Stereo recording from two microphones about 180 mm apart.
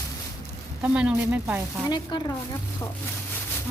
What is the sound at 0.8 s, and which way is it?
Speech, 5° right (ahead or behind).